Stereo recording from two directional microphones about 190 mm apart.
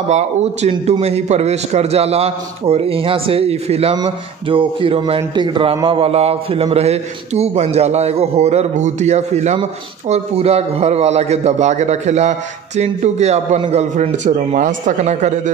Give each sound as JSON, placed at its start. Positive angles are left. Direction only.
{"t": 0.1, "sound": "speech", "side_deg": -35}